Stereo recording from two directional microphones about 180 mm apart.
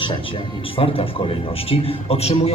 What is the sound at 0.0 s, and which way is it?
Speech, 30° left (ahead or behind).